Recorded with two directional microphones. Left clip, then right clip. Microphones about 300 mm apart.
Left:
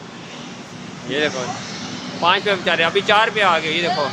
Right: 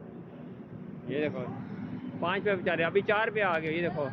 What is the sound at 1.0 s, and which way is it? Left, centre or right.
Speech, centre.